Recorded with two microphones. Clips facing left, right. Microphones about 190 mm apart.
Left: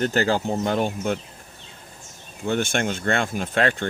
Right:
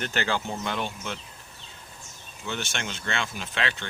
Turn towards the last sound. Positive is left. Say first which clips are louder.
# left 9 dB
turn(degrees=50)  # may be behind; listen again after turning